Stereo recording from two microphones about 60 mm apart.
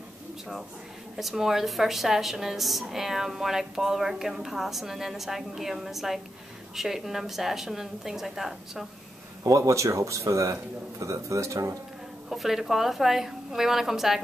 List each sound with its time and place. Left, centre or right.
1.1 s a woman's voice: centre
9.4 s a man's voice: right
12.3 s a woman's voice: centre